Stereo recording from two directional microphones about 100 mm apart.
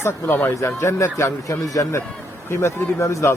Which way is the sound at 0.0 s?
20° left (ahead or behind).